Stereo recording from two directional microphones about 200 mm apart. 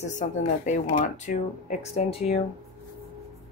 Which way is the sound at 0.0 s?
40° left (ahead or behind).